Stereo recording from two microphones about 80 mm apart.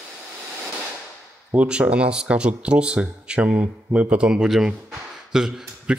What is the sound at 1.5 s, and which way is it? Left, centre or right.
Speech, centre.